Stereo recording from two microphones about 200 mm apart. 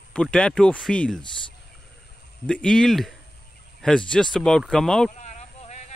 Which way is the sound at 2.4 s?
5° left (ahead or behind).